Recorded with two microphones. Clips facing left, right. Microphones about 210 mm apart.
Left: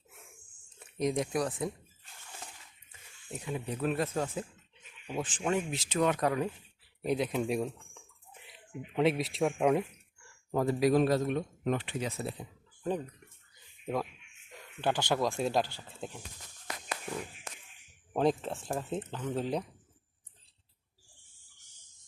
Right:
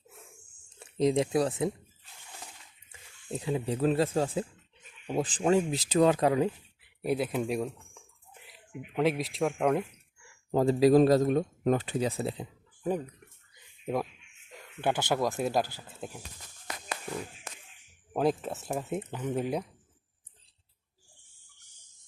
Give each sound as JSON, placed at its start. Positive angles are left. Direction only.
{"t": 0.8, "sound": "speech", "side_deg": -30}
{"t": 3.3, "sound": "speech", "side_deg": -30}
{"t": 7.0, "sound": "a sound", "side_deg": -5}
{"t": 8.8, "sound": "speech", "side_deg": 0}
{"t": 10.5, "sound": "speech", "side_deg": -25}
{"t": 12.8, "sound": "speech", "side_deg": -10}
{"t": 18.1, "sound": "speech", "side_deg": -5}